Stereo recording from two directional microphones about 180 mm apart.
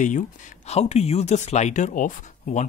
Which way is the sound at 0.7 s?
35° left (ahead or behind).